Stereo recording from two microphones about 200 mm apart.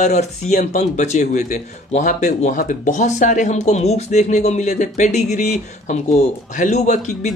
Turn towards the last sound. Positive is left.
turn(degrees=35)  # may be behind; listen again after turning